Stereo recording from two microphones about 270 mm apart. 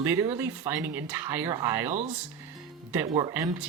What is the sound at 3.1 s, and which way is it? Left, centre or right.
Speech, centre.